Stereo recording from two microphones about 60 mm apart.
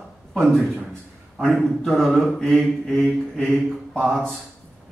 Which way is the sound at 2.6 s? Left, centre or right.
Centre.